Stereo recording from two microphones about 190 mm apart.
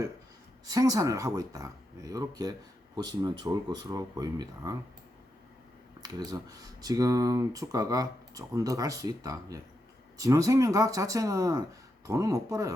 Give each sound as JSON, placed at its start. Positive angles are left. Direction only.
{"t": 0.6, "sound": "speech", "side_deg": -20}
{"t": 6.0, "sound": "speech", "side_deg": -20}